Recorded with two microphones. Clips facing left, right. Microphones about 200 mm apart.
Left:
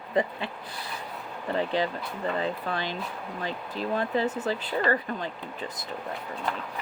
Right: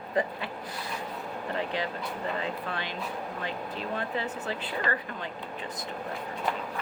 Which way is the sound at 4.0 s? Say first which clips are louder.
Left 8 dB; 35° left (ahead or behind).